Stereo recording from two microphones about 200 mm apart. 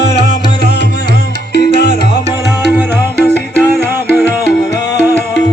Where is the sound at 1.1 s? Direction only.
50° left (ahead or behind).